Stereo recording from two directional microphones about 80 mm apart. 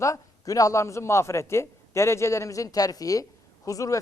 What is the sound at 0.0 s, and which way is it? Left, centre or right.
Speech, left.